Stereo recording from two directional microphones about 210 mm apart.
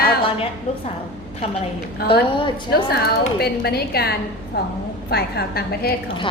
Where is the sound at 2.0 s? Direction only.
25° left (ahead or behind).